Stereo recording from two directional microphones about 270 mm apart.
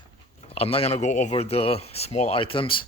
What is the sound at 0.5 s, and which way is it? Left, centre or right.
Speech, left.